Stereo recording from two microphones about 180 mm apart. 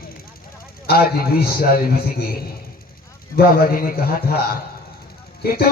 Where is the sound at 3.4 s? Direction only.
55° left (ahead or behind).